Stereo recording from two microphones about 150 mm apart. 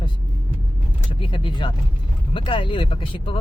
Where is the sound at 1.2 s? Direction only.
35° left (ahead or behind).